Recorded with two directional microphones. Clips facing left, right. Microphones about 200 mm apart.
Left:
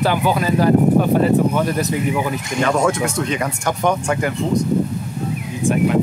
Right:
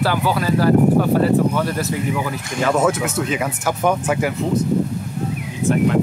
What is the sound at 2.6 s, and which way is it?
Speech, 5° right (ahead or behind).